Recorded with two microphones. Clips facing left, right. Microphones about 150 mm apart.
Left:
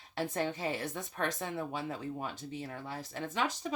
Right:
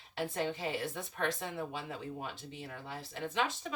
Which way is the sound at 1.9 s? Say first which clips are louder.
Left 3 dB; 45° left (ahead or behind).